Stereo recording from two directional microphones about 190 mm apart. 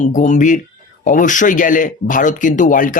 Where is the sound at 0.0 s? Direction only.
40° left (ahead or behind).